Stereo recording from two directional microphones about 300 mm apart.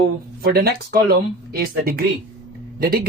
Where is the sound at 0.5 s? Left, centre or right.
Right.